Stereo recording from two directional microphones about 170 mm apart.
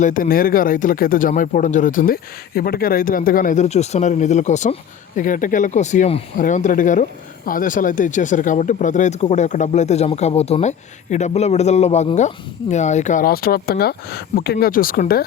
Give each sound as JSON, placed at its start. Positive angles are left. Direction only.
{"t": 0.0, "sound": "speech", "side_deg": 55}